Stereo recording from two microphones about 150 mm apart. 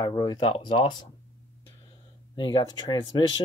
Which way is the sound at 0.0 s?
25° left (ahead or behind).